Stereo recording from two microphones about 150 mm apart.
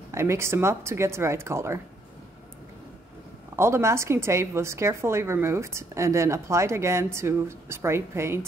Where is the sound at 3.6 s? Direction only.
20° right (ahead or behind).